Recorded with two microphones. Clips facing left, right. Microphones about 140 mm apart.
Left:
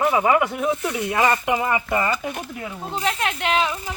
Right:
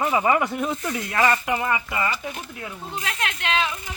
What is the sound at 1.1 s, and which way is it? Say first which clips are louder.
Speech: left 1 dB; 20° left (ahead or behind).